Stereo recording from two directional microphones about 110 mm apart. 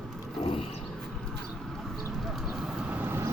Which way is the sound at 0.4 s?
65° left (ahead or behind).